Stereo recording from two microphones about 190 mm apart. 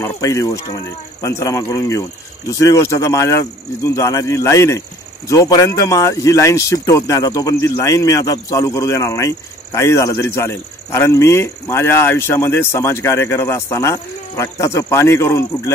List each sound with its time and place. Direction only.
0.0 s speech: 15° left (ahead or behind)